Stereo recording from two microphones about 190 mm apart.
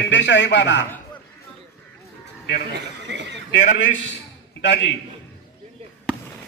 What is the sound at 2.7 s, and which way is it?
Speech, 65° right (ahead or behind).